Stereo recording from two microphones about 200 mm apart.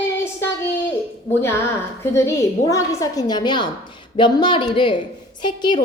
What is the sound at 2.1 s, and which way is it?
A woman's voice, 15° left (ahead or behind).